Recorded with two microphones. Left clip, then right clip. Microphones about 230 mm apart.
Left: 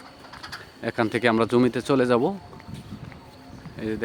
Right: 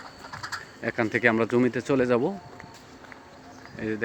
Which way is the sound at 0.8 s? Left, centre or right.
Centre.